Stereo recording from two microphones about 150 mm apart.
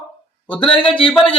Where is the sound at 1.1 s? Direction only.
5° left (ahead or behind).